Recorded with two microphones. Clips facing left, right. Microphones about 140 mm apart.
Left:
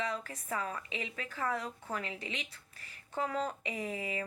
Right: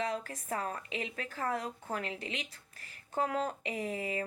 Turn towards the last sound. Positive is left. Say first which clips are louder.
# right 2 dB
turn(degrees=-40)  # may be behind; listen again after turning